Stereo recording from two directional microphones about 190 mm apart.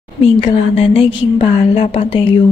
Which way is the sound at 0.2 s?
30° left (ahead or behind).